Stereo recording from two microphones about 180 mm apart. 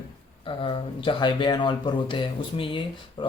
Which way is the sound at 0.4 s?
30° left (ahead or behind).